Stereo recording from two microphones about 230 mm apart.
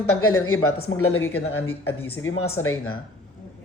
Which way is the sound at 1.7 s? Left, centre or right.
Left.